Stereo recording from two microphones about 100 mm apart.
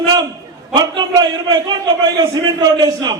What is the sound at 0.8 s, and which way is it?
A man's voice, 45° right (ahead or behind).